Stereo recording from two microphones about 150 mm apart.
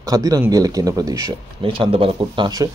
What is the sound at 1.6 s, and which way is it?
Speech, 35° right (ahead or behind).